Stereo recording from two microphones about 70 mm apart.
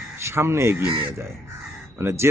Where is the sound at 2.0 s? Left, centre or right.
Right.